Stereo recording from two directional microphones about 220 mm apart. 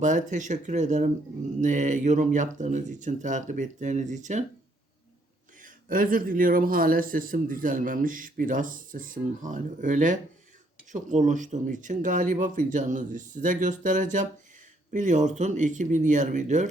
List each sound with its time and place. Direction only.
0.0 s a man's voice: 35° right (ahead or behind)
5.6 s a man's voice: 40° right (ahead or behind)